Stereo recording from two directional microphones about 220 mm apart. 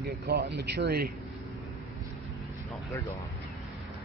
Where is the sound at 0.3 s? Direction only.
50° right (ahead or behind).